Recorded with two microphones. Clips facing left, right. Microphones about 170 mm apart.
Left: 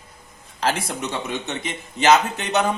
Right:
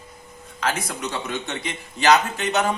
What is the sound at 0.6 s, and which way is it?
Speech, 30° left (ahead or behind).